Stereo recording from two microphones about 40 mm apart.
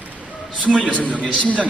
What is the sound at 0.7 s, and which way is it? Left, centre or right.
Speech, left.